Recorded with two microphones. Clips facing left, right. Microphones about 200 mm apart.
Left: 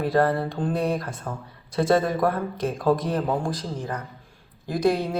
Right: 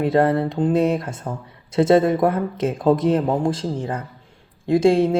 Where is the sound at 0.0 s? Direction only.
25° right (ahead or behind).